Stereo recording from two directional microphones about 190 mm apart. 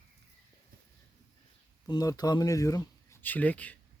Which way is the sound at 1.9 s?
20° left (ahead or behind).